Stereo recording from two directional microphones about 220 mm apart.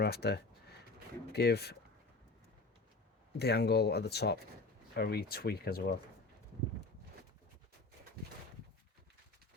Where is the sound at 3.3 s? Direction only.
45° left (ahead or behind).